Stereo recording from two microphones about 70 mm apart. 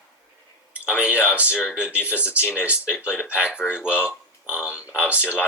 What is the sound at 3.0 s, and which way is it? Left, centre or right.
Speech, left.